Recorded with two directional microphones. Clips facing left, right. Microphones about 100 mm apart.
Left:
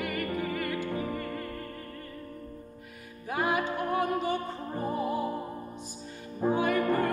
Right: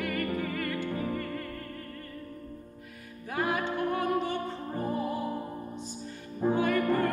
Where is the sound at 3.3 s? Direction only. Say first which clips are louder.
Left 1 dB; 15° left (ahead or behind).